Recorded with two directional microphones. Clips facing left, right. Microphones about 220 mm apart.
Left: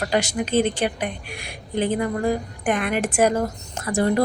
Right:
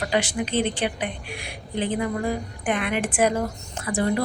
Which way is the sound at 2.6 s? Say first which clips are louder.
Left 2 dB; 45° left (ahead or behind).